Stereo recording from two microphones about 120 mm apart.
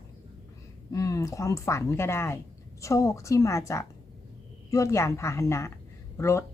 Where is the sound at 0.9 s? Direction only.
25° left (ahead or behind).